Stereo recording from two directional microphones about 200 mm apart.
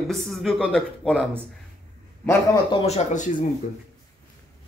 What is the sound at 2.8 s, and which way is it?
Speech, 35° left (ahead or behind).